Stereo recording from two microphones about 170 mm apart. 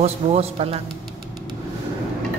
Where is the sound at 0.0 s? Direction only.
40° right (ahead or behind).